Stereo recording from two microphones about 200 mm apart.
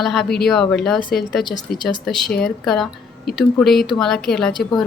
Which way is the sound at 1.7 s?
50° left (ahead or behind).